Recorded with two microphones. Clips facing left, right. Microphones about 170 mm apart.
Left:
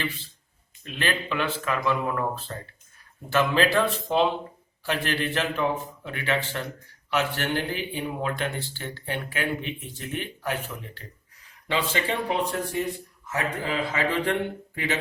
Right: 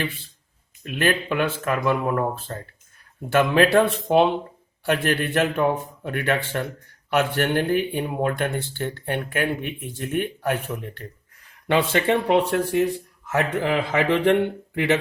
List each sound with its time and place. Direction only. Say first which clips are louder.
0.9 s a man's voice: right 6 dB; 50° right (ahead or behind)
11.7 s speech: right 7 dB; 55° right (ahead or behind)